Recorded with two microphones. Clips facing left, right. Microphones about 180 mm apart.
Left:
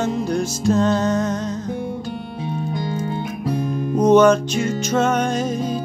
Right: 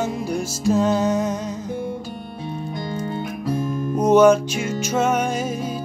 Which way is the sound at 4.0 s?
5° right (ahead or behind).